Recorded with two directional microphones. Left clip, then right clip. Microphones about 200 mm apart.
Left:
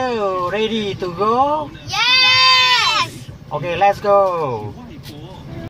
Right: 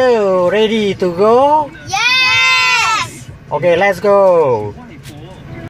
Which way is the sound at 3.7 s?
50° right (ahead or behind).